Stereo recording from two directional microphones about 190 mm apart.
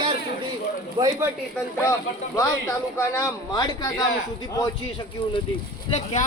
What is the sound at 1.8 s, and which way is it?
A man's voice, 15° left (ahead or behind).